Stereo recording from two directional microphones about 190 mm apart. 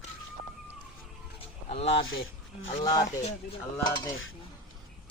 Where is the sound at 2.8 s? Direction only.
20° left (ahead or behind).